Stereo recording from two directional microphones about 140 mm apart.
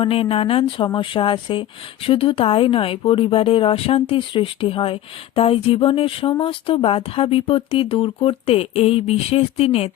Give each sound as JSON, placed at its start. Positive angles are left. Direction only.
{"t": 0.0, "sound": "speech", "side_deg": 40}